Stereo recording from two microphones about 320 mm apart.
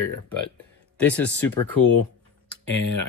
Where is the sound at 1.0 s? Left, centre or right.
Centre.